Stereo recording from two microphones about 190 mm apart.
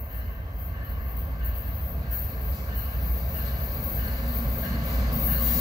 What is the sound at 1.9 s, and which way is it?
Vehicle, 20° right (ahead or behind).